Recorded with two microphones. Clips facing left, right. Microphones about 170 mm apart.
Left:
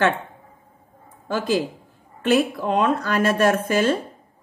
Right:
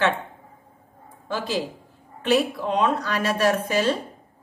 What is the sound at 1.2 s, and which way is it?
A woman's voice, 50° left (ahead or behind).